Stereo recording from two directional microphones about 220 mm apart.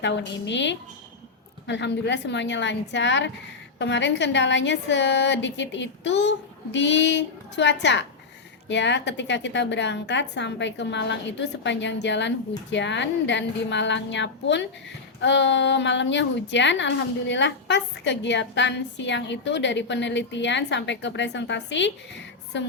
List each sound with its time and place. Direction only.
0.0 s a woman's voice: 55° left (ahead or behind)